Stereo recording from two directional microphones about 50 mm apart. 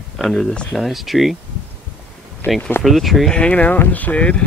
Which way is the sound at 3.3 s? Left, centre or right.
Left.